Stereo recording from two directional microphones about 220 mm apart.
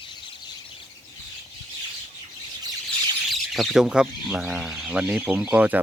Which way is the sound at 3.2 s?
Centre (ahead or behind).